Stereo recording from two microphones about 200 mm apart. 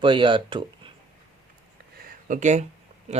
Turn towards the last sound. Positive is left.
turn(degrees=-35)  # may be behind; listen again after turning